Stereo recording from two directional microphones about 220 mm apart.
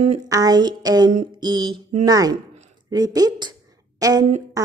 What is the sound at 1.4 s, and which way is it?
A woman's voice, 20° right (ahead or behind).